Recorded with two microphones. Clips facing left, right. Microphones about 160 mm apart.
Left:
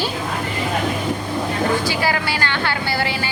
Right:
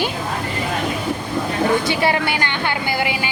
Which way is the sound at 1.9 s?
25° right (ahead or behind).